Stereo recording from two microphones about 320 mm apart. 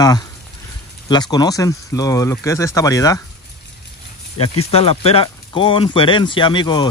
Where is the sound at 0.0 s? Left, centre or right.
Centre.